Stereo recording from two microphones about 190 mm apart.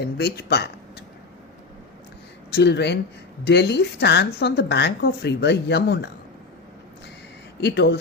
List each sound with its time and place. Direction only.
0.0 s speech: 60° left (ahead or behind)
2.5 s speech: 60° left (ahead or behind)
7.6 s speech: 60° left (ahead or behind)